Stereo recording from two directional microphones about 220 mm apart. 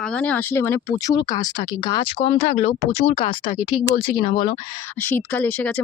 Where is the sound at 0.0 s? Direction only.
5° left (ahead or behind); by 4.5 s 20° left (ahead or behind).